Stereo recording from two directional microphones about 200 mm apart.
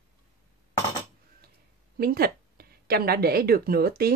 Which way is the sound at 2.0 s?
50° right (ahead or behind).